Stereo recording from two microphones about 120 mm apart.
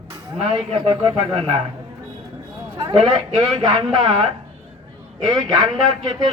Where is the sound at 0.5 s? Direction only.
45° right (ahead or behind).